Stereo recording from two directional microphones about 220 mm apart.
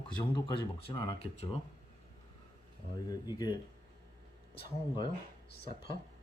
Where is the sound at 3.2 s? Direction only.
20° left (ahead or behind).